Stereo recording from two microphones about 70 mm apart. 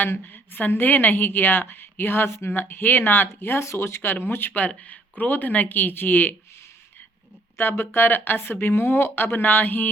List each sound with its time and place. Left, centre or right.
0.0 s a woman's voice: left
7.6 s a woman's voice: left